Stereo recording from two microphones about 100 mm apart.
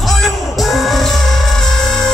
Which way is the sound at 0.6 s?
Centre (ahead or behind).